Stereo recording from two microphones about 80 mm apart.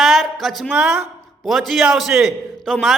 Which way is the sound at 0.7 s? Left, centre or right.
Centre.